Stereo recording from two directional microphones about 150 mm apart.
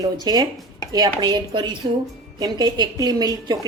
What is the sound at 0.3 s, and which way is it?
A woman's voice, 25° right (ahead or behind).